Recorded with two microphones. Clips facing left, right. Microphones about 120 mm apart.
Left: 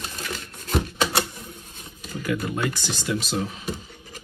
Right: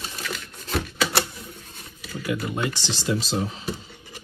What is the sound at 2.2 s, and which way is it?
Speech, 20° right (ahead or behind).